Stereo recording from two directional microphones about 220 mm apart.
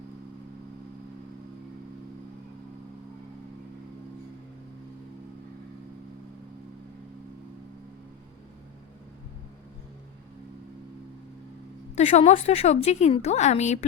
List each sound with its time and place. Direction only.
11.9 s a woman's voice: 30° left (ahead or behind)